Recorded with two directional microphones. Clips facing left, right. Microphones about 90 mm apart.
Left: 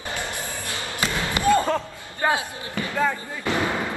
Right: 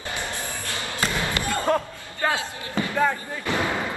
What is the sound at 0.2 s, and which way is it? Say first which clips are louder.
Basketball bounce: even; 20° left (ahead or behind).